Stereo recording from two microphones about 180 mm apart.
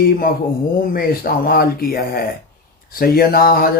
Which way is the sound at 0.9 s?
55° left (ahead or behind).